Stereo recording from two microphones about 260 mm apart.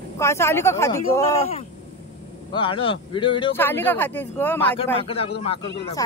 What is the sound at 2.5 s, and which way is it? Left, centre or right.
Speech, centre.